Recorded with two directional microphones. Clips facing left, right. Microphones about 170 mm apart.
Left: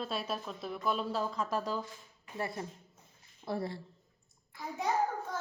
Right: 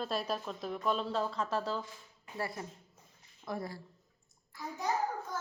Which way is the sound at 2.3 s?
25° left (ahead or behind).